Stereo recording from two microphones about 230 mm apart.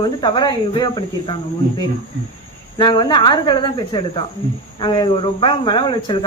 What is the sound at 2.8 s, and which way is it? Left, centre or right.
A woman's voice, centre.